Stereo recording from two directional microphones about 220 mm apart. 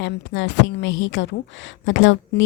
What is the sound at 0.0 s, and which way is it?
A woman's voice, 55° left (ahead or behind).